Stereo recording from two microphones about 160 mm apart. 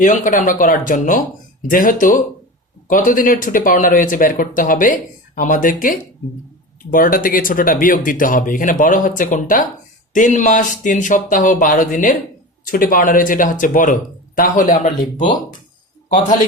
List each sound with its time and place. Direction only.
0.0 s speech: 50° left (ahead or behind)